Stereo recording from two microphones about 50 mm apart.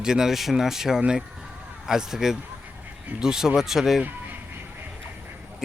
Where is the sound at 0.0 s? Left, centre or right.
Centre.